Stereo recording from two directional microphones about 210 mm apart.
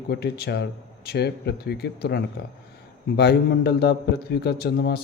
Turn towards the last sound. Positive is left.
turn(degrees=50)  # may be behind; listen again after turning